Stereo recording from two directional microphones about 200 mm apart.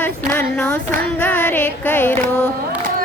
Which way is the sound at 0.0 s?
5° left (ahead or behind).